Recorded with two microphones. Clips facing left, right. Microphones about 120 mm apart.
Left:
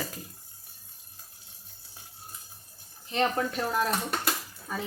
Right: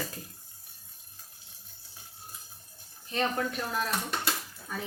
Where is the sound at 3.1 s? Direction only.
30° left (ahead or behind).